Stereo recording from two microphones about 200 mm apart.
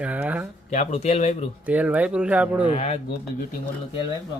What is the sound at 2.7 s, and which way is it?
Speech, 35° left (ahead or behind).